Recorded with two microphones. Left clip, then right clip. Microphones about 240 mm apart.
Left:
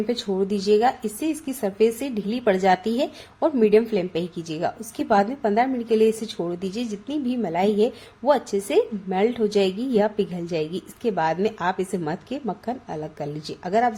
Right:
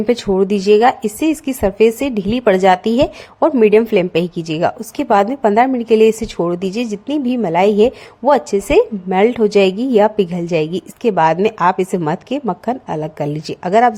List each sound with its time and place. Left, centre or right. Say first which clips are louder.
0.1 s a woman's voice: right 13 dB; right